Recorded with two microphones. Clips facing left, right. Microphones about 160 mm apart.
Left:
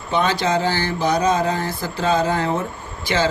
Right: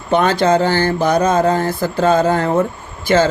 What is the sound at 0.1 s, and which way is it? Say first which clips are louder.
Speech: right 6 dB; 55° right (ahead or behind).